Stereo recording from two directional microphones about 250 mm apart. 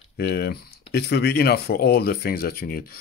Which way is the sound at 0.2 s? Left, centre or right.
Left.